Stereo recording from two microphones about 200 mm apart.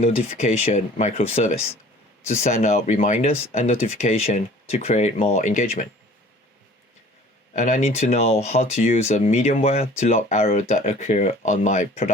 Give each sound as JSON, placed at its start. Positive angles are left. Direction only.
{"t": 0.0, "sound": "speech", "side_deg": 35}
{"t": 7.5, "sound": "speech", "side_deg": 35}